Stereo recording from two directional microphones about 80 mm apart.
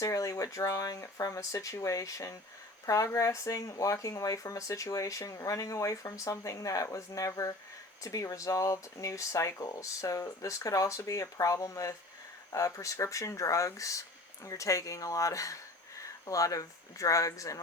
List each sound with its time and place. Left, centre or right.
0.0 s speech: left